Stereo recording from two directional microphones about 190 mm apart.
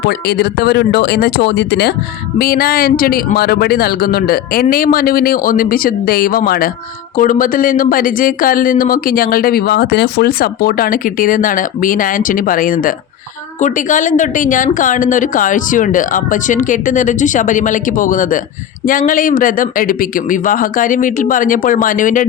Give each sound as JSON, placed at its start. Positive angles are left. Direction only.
{"t": 0.0, "sound": "speech", "side_deg": 55}
{"t": 2.4, "sound": "speech", "side_deg": 50}